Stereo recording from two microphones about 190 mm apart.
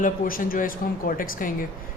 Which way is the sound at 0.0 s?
45° left (ahead or behind).